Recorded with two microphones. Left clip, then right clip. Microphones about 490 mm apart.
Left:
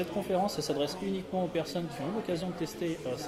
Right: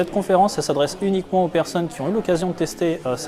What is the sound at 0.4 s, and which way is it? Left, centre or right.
Speech, right.